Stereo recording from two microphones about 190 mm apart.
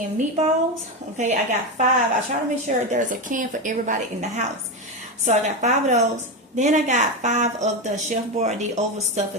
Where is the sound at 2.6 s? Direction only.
40° right (ahead or behind).